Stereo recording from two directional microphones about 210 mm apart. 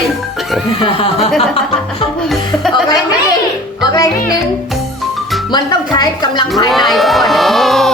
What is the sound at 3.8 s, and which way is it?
Speech, 20° left (ahead or behind).